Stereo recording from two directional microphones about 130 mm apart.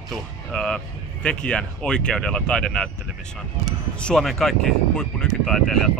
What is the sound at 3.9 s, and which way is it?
Speech, 5° left (ahead or behind).